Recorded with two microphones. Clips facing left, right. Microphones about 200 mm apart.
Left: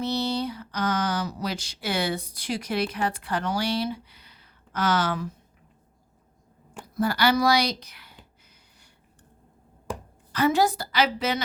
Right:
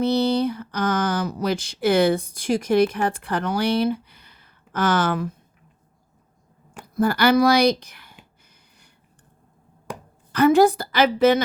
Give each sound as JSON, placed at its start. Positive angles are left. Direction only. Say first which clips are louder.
{"t": 0.0, "sound": "speech", "louder": "right 7 dB", "side_deg": -60}
{"t": 6.9, "sound": "speech", "louder": "right 5 dB", "side_deg": -50}
{"t": 10.3, "sound": "speech", "louder": "right 7 dB", "side_deg": -55}